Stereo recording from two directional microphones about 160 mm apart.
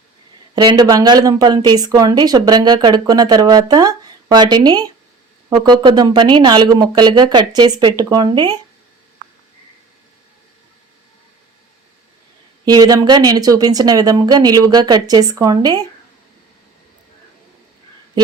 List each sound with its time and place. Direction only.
0.5 s speech: 30° right (ahead or behind)
12.6 s speech: 25° right (ahead or behind)